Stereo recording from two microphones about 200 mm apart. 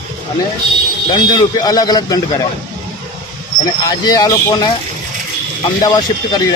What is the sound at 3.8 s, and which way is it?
Speech, 20° left (ahead or behind).